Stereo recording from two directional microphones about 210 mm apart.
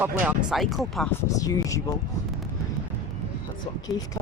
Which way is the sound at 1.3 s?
15° left (ahead or behind).